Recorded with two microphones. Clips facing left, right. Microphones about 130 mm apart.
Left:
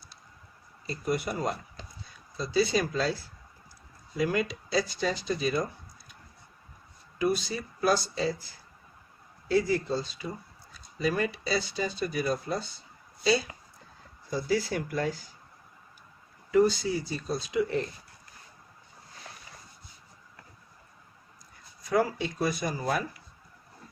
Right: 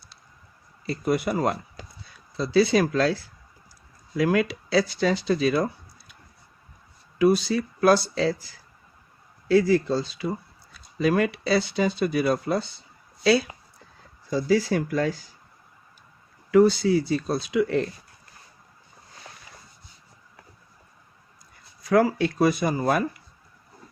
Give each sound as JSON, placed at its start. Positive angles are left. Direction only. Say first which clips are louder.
{"t": 0.9, "sound": "speech", "louder": "right 6 dB", "side_deg": -75}
{"t": 4.2, "sound": "speech", "louder": "right 6 dB", "side_deg": -80}
{"t": 7.2, "sound": "speech", "louder": "right 8 dB", "side_deg": -80}
{"t": 9.5, "sound": "speech", "louder": "right 6 dB", "side_deg": -90}
{"t": 14.3, "sound": "speech", "louder": "right 6 dB", "side_deg": -90}
{"t": 16.5, "sound": "speech", "louder": "right 6 dB", "side_deg": -80}
{"t": 21.8, "sound": "speech", "louder": "right 7 dB", "side_deg": -85}